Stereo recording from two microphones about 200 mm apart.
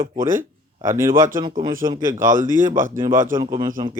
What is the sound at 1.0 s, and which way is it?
Speech, 15° right (ahead or behind).